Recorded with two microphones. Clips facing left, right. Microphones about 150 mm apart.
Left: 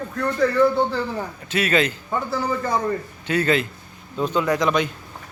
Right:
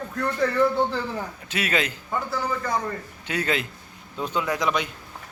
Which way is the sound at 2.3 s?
30° left (ahead or behind).